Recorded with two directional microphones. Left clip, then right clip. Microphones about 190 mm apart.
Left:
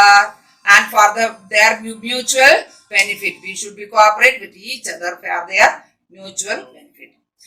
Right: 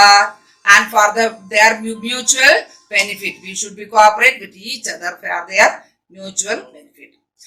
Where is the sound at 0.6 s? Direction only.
50° right (ahead or behind).